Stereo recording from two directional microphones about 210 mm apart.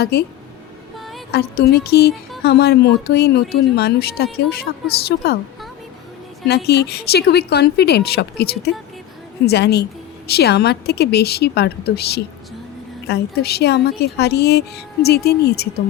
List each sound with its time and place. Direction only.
0.0 s speech: 50° left (ahead or behind)
1.3 s speech: 50° left (ahead or behind)
6.5 s speech: 50° left (ahead or behind)